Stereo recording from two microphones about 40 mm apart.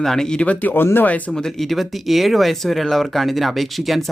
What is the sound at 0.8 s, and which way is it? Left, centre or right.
Speech, left.